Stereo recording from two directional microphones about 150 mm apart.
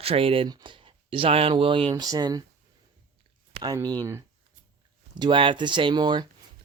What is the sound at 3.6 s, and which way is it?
Speech, 25° right (ahead or behind).